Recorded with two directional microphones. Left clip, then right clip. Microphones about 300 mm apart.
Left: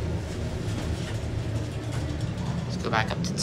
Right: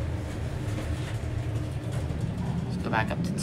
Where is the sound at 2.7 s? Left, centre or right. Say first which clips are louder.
Left 2 dB; centre.